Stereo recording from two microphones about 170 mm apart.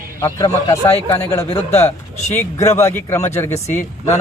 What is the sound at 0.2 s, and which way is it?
A man's voice, 20° left (ahead or behind).